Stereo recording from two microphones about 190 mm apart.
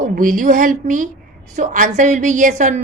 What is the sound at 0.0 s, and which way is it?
A woman's voice, 45° right (ahead or behind).